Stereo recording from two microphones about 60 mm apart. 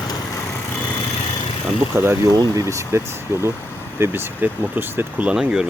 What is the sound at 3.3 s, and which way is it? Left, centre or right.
Speech, right.